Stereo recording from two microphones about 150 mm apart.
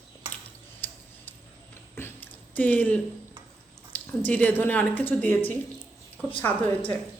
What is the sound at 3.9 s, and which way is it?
Speech, 10° left (ahead or behind).